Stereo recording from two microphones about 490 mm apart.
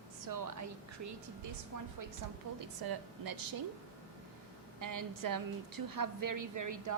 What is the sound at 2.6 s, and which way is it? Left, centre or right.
Speech, right.